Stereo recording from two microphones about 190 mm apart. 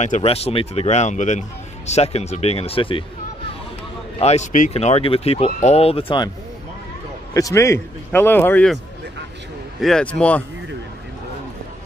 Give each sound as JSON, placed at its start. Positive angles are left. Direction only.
{"t": 0.0, "sound": "speech", "side_deg": 35}
{"t": 4.2, "sound": "speech", "side_deg": 35}
{"t": 7.3, "sound": "a man's voice", "side_deg": 15}
{"t": 9.8, "sound": "a man's voice", "side_deg": 0}